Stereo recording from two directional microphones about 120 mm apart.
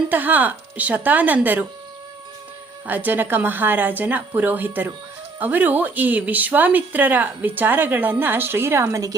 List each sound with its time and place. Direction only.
0.1 s speech: 15° right (ahead or behind)
2.8 s speech: 15° right (ahead or behind)